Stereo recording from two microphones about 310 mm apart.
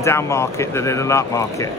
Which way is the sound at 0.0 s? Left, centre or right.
Centre.